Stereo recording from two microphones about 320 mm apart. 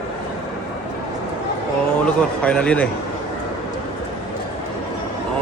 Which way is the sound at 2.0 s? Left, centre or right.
Centre.